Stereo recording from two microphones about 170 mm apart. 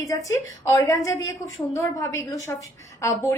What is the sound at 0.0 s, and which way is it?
A woman's voice, 20° left (ahead or behind).